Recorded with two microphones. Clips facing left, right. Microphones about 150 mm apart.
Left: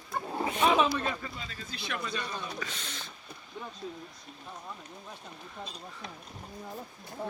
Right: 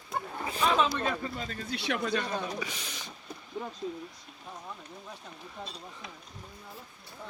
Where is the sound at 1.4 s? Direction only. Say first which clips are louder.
Right 6 dB; 45° right (ahead or behind).